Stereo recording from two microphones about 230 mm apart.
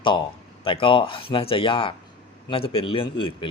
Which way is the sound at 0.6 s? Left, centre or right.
Left.